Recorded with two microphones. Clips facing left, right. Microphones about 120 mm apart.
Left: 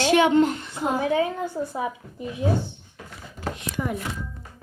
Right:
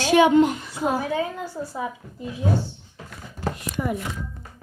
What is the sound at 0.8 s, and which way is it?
A woman's voice, 20° left (ahead or behind).